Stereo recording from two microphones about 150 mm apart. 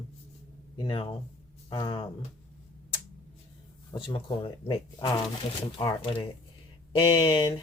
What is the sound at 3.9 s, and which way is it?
Speech, 35° left (ahead or behind).